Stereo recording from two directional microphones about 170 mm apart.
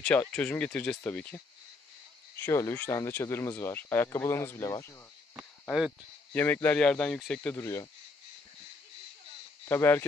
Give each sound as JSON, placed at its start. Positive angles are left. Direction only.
{"t": 0.0, "sound": "speech", "side_deg": 5}
{"t": 5.4, "sound": "speech", "side_deg": 0}
{"t": 7.5, "sound": "speech", "side_deg": 15}
{"t": 9.7, "sound": "speech", "side_deg": 15}